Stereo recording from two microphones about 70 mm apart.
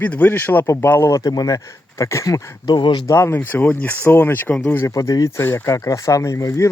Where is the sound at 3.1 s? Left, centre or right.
Left.